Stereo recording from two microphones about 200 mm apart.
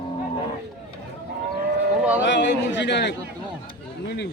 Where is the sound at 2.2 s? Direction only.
60° left (ahead or behind).